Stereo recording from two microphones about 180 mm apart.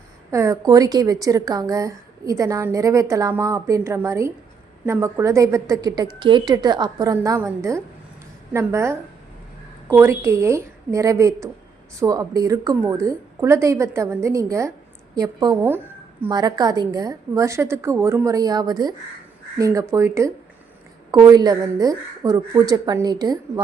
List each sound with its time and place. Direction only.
0.3 s a woman's voice: 15° right (ahead or behind)